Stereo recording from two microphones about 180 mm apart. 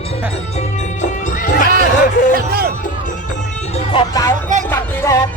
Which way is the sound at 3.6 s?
35° left (ahead or behind).